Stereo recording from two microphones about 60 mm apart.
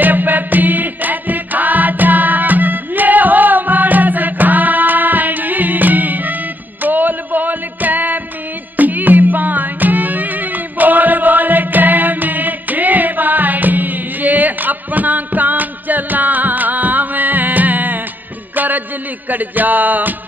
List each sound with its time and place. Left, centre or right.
0.0 s music: right